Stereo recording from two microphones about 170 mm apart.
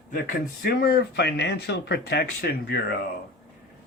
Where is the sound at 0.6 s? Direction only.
65° left (ahead or behind).